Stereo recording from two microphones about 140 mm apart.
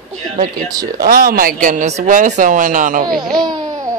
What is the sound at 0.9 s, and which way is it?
Speech, 90° right.